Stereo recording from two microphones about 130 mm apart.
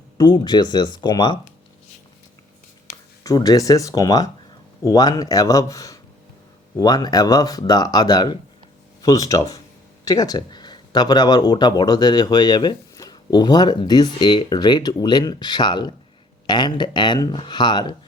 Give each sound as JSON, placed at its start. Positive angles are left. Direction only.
{"t": 0.2, "sound": "speech", "side_deg": 35}
{"t": 3.2, "sound": "speech", "side_deg": 30}